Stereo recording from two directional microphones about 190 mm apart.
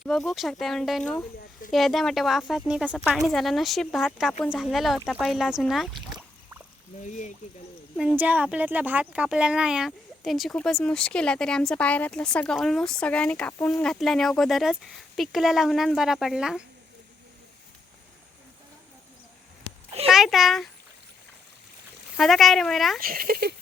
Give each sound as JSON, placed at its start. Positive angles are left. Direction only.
{"t": 0.0, "sound": "speech", "side_deg": 0}
{"t": 7.9, "sound": "speech", "side_deg": -5}
{"t": 20.1, "sound": "a child's voice", "side_deg": 0}
{"t": 22.2, "sound": "speech", "side_deg": 0}
{"t": 23.0, "sound": "speech", "side_deg": -50}